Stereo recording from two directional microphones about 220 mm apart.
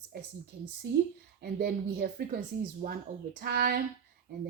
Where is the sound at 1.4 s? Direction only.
45° right (ahead or behind).